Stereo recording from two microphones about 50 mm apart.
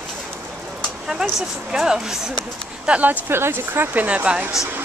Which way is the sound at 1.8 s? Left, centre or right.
Centre.